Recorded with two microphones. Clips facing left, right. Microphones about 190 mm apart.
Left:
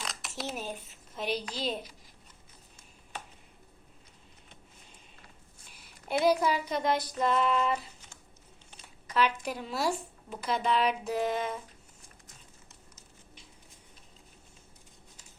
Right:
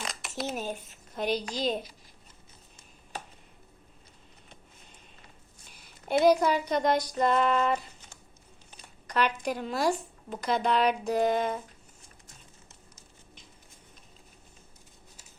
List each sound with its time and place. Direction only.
0.0 s speech: centre (ahead or behind)
6.1 s speech: 5° left (ahead or behind)
7.5 s speech: 45° right (ahead or behind)
9.0 s speech: 5° left (ahead or behind)